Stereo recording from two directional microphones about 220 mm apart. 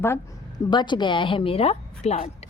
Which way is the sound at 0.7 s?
20° left (ahead or behind).